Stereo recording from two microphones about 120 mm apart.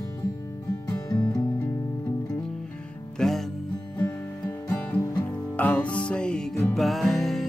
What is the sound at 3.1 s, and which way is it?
Music, centre (ahead or behind).